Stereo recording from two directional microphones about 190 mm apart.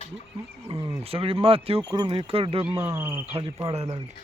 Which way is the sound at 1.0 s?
30° right (ahead or behind).